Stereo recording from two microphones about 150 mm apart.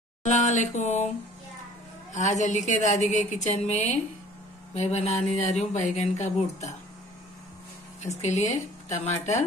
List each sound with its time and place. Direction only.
0.2 s speech: 55° left (ahead or behind)
2.1 s a woman's voice: 55° left (ahead or behind)
8.0 s speech: 50° left (ahead or behind)